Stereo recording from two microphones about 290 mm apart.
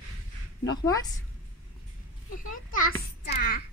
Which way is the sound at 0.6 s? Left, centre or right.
Centre.